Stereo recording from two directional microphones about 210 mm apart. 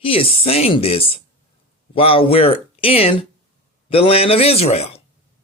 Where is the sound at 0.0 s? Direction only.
25° left (ahead or behind).